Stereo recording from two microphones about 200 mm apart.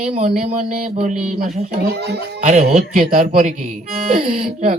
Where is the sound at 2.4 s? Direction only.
35° right (ahead or behind).